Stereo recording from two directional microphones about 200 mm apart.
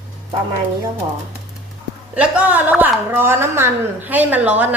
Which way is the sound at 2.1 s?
5° right (ahead or behind).